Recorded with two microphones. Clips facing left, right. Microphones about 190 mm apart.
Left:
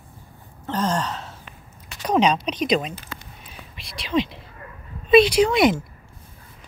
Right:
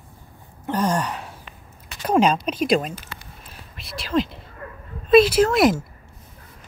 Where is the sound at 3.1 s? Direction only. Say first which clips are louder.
Left 2 dB; 90° left.